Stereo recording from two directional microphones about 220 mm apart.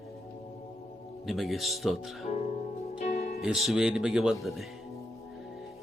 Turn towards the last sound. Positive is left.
turn(degrees=0)  # may be behind; listen again after turning